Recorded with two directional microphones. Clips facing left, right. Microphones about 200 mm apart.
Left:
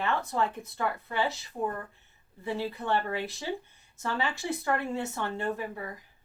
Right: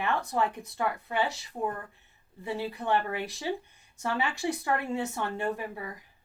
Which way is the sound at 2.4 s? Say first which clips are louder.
Even; 15° right (ahead or behind).